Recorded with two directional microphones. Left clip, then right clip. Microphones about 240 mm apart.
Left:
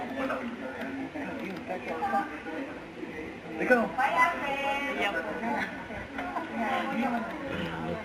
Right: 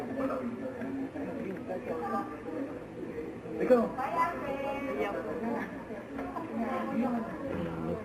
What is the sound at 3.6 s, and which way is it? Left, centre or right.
A woman's voice, centre.